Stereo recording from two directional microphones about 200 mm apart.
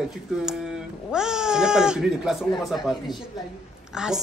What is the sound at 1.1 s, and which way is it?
Speech, 5° right (ahead or behind).